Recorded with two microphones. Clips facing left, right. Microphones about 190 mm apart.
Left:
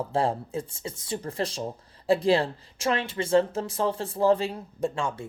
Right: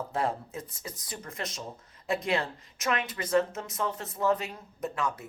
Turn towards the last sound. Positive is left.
turn(degrees=30)  # may be behind; listen again after turning